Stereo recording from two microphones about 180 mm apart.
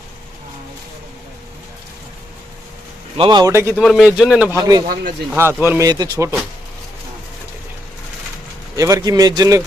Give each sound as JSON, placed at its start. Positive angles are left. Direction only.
{"t": 3.2, "sound": "speech", "side_deg": -25}
{"t": 3.8, "sound": "speech", "side_deg": 0}
{"t": 4.5, "sound": "speech", "side_deg": -20}
{"t": 5.3, "sound": "speech", "side_deg": -10}
{"t": 8.7, "sound": "speech", "side_deg": -20}